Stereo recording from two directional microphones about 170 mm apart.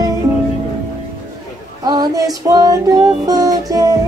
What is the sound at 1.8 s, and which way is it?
Music, 25° right (ahead or behind).